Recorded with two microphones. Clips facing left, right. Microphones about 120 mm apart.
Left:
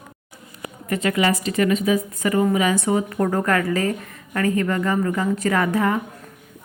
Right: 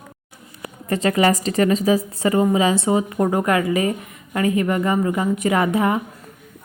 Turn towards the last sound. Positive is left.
turn(degrees=-20)  # may be behind; listen again after turning